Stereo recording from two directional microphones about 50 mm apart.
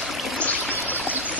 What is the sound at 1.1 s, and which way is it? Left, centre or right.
Stream, right.